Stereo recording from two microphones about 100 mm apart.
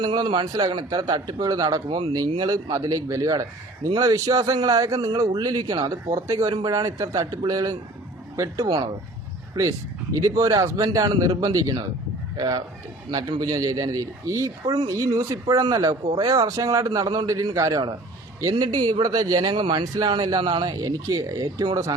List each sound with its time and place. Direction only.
0.0 s a man's voice: 50° right (ahead or behind)
10.2 s a man's voice: 35° right (ahead or behind)